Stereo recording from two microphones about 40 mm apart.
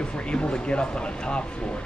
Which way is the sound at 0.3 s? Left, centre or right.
Left.